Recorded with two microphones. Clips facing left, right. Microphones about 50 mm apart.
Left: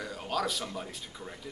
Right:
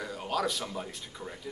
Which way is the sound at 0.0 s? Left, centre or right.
Centre.